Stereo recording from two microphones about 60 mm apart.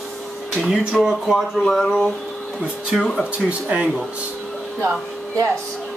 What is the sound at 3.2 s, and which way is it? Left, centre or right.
Speech, right.